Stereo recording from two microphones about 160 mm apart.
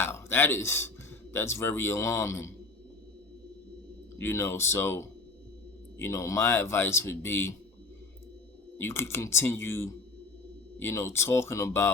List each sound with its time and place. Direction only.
0.0 s speech: 15° left (ahead or behind)
4.2 s speech: 15° left (ahead or behind)
8.8 s speech: 15° left (ahead or behind)